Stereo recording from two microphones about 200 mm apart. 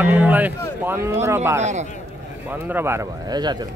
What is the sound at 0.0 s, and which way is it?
Speech, 10° right (ahead or behind).